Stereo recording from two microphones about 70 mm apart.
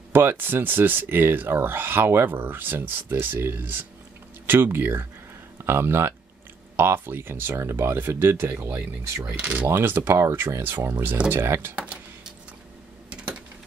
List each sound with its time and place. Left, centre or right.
0.1 s speech: right
9.2 s speech: centre
9.7 s speech: right
11.7 s speech: centre
13.1 s a sound: centre